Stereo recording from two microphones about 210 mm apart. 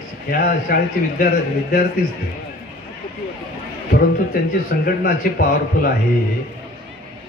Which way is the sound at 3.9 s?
45° left (ahead or behind).